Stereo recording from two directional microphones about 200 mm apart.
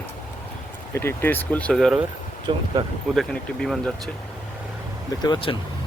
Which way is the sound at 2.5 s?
25° right (ahead or behind).